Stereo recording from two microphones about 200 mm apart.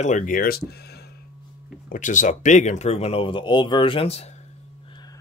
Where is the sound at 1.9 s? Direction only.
40° left (ahead or behind).